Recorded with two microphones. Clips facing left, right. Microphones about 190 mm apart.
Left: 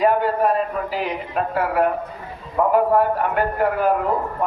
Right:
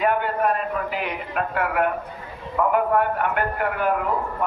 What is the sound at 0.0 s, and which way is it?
A man's voice, 35° left (ahead or behind).